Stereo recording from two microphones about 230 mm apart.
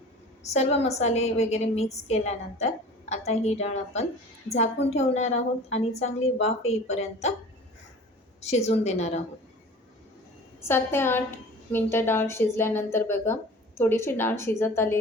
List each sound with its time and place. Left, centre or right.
0.4 s a woman's voice: left
8.4 s a woman's voice: left
10.6 s a woman's voice: centre